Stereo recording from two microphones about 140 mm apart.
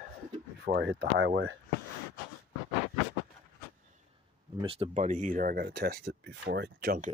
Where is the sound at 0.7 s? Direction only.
55° right (ahead or behind).